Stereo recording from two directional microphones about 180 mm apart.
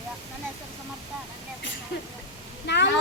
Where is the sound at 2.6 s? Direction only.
70° left (ahead or behind).